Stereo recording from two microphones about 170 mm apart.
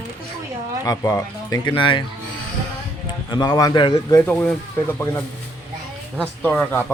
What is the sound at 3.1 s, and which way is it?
A man's voice, 25° left (ahead or behind).